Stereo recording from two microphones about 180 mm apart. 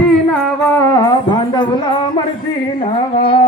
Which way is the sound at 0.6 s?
15° left (ahead or behind).